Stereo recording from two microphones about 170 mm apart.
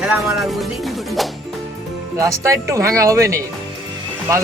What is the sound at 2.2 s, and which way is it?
Speech, 20° right (ahead or behind).